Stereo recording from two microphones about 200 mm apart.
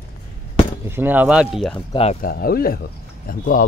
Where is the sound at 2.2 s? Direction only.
50° left (ahead or behind).